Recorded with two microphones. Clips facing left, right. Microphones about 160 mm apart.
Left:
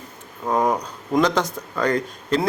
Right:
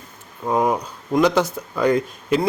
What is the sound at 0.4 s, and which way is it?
Speech, 5° right (ahead or behind).